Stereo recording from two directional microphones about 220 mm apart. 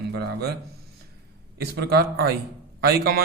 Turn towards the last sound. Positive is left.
turn(degrees=-45)  # may be behind; listen again after turning